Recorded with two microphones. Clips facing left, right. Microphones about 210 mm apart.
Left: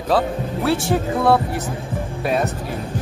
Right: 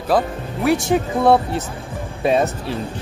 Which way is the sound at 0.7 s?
20° right (ahead or behind).